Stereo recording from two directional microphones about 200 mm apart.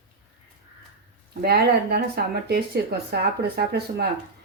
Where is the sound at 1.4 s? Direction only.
50° right (ahead or behind).